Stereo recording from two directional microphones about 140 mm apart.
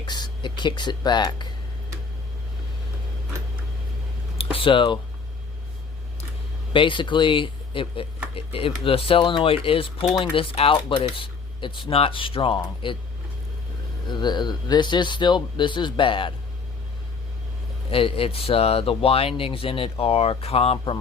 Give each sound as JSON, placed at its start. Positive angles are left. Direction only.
{"t": 0.0, "sound": "speech", "side_deg": 30}
{"t": 4.5, "sound": "speech", "side_deg": 40}
{"t": 6.7, "sound": "speech", "side_deg": 35}
{"t": 14.1, "sound": "speech", "side_deg": 30}
{"t": 17.9, "sound": "speech", "side_deg": 40}